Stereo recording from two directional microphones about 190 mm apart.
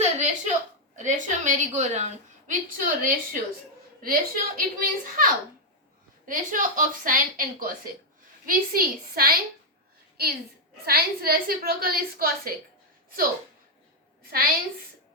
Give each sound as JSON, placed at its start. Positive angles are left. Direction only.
{"t": 0.0, "sound": "a sound", "side_deg": -40}
{"t": 0.9, "sound": "a woman's voice", "side_deg": -40}
{"t": 10.8, "sound": "a woman's voice", "side_deg": -55}